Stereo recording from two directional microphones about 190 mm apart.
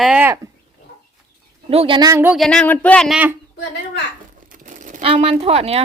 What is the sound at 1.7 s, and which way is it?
Speech, 30° right (ahead or behind).